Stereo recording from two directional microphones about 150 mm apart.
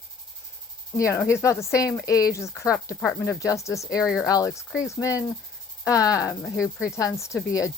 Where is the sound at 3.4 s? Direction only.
20° left (ahead or behind).